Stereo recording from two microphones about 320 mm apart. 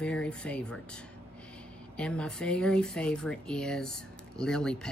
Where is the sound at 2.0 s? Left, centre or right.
Centre.